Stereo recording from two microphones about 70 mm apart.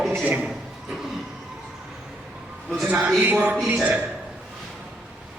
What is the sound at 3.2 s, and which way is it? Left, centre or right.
Speech, right.